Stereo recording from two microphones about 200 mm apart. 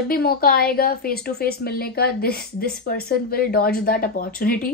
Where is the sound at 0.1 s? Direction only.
50° left (ahead or behind).